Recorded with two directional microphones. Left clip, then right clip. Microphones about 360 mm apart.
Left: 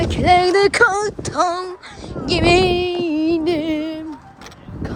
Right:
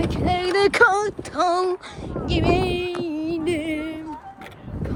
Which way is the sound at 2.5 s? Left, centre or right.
Centre.